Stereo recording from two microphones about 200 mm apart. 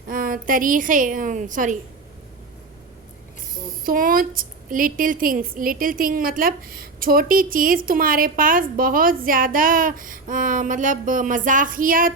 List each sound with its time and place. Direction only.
0.1 s a woman's voice: 45° right (ahead or behind)
3.8 s a woman's voice: 45° right (ahead or behind)